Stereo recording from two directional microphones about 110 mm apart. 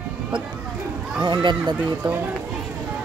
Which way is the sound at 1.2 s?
45° right (ahead or behind).